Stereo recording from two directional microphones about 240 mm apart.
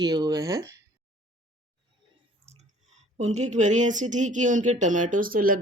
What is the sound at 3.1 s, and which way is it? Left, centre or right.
Speech, right.